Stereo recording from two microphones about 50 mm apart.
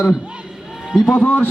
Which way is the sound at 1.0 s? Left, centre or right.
Left.